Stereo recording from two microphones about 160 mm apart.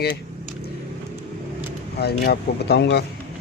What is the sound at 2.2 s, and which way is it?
Speech, 90° left.